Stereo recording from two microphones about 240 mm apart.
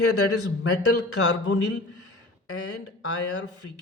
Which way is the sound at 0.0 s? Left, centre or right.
Left.